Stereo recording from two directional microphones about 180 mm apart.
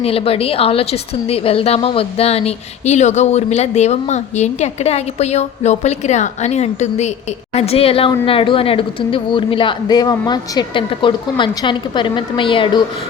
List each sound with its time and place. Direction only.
0.0 s a woman's voice: 35° left (ahead or behind)